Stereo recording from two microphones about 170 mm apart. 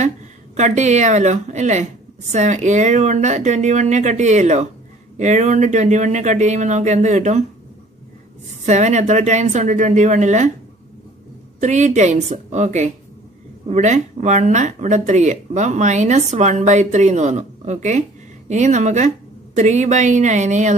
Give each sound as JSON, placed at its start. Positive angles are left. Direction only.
{"t": 0.6, "sound": "speech", "side_deg": -45}
{"t": 8.6, "sound": "speech", "side_deg": -45}
{"t": 11.6, "sound": "speech", "side_deg": -45}